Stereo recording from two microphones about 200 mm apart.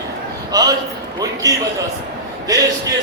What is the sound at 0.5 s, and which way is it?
Speech, 20° right (ahead or behind).